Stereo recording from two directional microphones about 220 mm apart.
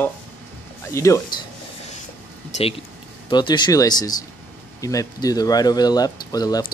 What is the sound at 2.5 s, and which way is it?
Speech, 30° left (ahead or behind).